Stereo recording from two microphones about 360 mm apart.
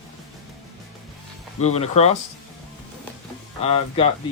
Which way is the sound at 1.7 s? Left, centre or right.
Centre.